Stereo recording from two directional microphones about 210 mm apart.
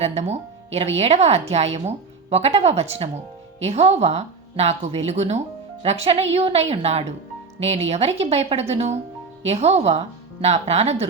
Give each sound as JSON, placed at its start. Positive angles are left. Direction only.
{"t": 0.0, "sound": "speech", "side_deg": -30}